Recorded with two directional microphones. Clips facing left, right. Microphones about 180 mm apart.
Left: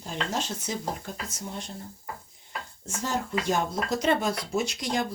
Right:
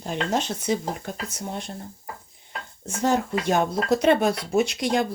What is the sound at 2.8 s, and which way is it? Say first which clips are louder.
Speech: right 8 dB; 60° right (ahead or behind).